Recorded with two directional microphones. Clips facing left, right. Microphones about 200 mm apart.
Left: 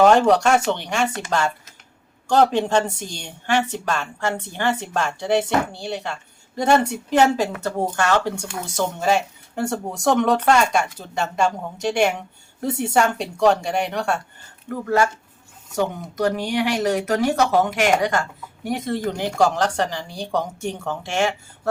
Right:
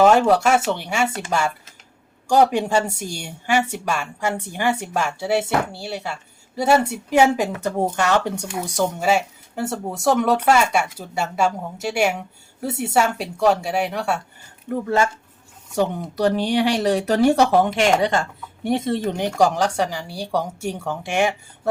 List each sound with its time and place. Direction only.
0.0 s speech: 5° right (ahead or behind)
14.7 s speech: 25° right (ahead or behind)